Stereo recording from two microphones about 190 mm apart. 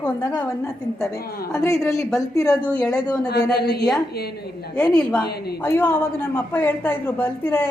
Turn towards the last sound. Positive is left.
turn(degrees=10)  # may be behind; listen again after turning